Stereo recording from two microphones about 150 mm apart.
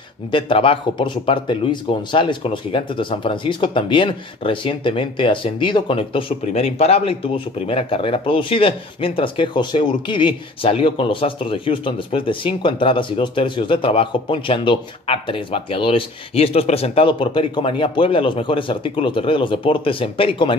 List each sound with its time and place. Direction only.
0.3 s speech: 35° left (ahead or behind)